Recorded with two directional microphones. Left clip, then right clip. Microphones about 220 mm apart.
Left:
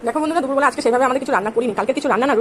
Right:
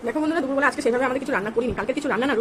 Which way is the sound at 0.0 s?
15° left (ahead or behind).